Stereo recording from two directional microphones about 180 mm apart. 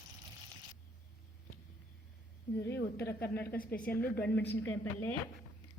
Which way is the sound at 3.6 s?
50° left (ahead or behind).